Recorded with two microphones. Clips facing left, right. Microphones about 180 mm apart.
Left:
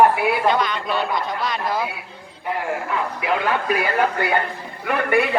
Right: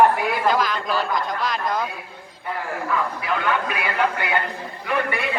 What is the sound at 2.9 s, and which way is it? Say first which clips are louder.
Speech: right 2 dB; 35° left (ahead or behind).